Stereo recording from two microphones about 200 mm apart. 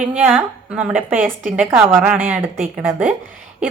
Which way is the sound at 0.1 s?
10° right (ahead or behind).